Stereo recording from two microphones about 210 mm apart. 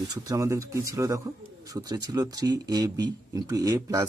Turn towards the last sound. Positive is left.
turn(degrees=-15)  # may be behind; listen again after turning